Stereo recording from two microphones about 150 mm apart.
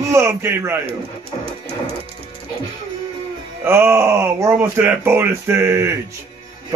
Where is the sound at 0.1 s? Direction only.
15° right (ahead or behind).